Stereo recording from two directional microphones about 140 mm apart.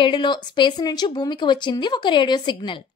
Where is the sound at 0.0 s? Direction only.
35° left (ahead or behind).